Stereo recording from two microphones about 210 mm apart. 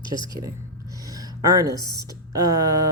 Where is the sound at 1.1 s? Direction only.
15° right (ahead or behind).